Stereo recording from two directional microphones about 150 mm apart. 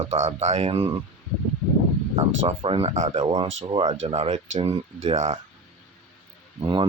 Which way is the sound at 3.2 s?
30° right (ahead or behind).